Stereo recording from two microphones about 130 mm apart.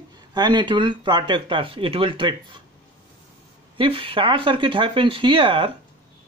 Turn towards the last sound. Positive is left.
turn(degrees=-40)  # may be behind; listen again after turning